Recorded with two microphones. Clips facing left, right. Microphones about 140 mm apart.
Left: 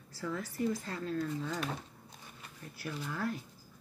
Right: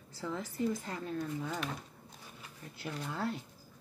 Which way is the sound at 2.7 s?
25° right (ahead or behind).